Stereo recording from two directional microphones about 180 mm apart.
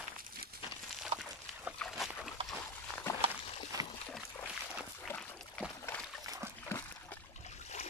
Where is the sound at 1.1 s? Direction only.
30° right (ahead or behind).